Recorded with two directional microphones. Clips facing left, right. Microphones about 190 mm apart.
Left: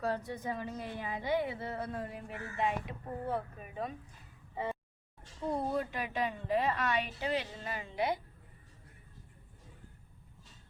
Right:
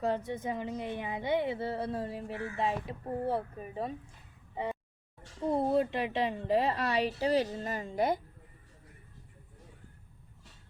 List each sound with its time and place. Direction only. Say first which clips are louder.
0.0 s a woman's voice: right 3 dB; 20° right (ahead or behind)
4.5 s a sound: right 2 dB; 15° right (ahead or behind)
5.5 s a woman's voice: right 6 dB; 25° right (ahead or behind); by 8.2 s 45° right (ahead or behind)